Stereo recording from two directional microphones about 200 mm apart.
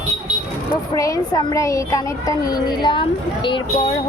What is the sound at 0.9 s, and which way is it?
Speech, 15° left (ahead or behind).